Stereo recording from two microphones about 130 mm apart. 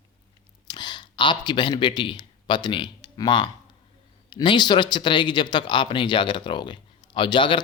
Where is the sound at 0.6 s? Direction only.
35° left (ahead or behind).